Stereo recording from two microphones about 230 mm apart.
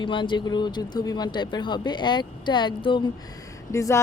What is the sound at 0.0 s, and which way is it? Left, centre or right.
Speech, left.